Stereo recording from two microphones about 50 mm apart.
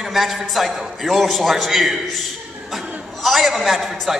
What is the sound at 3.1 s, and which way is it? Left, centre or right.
Speech, centre.